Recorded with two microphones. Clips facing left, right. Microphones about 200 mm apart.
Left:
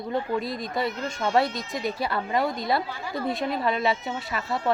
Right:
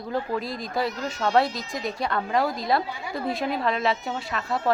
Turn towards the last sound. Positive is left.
turn(degrees=0)  # may be behind; listen again after turning